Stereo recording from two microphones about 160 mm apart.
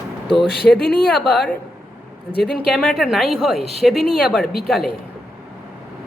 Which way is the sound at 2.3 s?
90° left.